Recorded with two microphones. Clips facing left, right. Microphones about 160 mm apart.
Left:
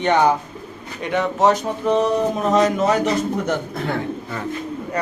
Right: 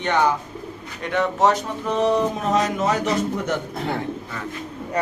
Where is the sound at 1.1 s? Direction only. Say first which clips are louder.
Left 2 dB; 5° left (ahead or behind).